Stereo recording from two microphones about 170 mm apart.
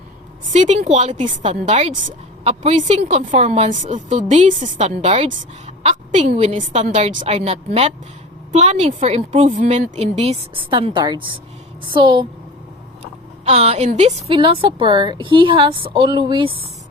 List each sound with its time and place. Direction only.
0.5 s a woman's voice: 40° right (ahead or behind)
13.0 s speech: 40° right (ahead or behind)